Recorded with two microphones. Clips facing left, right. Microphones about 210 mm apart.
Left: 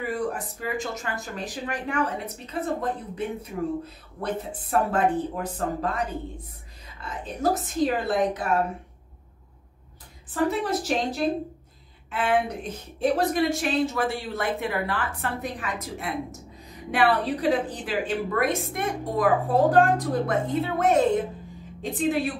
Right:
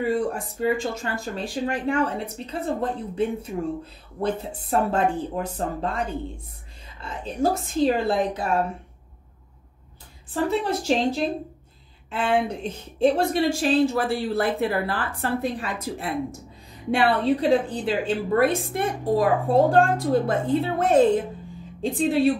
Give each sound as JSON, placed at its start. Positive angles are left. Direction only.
{"t": 0.0, "sound": "speech", "side_deg": -30}
{"t": 10.3, "sound": "a woman's voice", "side_deg": -25}